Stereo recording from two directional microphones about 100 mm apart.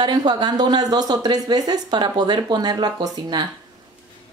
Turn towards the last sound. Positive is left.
turn(degrees=-45)  # may be behind; listen again after turning